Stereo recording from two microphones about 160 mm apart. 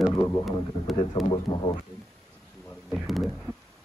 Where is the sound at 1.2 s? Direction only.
30° left (ahead or behind).